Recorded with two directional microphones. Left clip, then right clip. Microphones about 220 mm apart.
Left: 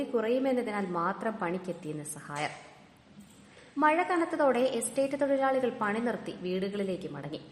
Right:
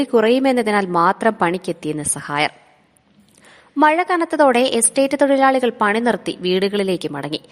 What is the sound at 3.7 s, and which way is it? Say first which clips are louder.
A woman's voice: right 11 dB; 45° right (ahead or behind).